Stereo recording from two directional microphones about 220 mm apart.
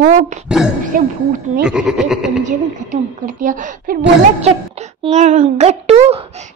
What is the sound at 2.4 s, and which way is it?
A woman's voice, 35° right (ahead or behind).